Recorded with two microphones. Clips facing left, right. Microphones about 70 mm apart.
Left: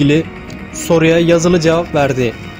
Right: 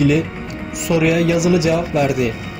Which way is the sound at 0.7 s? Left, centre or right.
Left.